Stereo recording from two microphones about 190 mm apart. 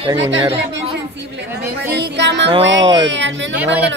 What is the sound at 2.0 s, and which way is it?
Music, 65° right (ahead or behind).